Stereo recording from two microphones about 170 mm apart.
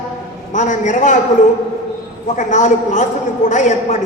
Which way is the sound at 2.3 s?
45° left (ahead or behind).